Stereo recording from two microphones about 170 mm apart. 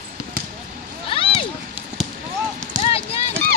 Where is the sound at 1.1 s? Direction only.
30° left (ahead or behind).